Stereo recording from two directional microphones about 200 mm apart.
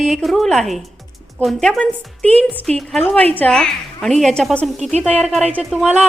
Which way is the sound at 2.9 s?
5° left (ahead or behind).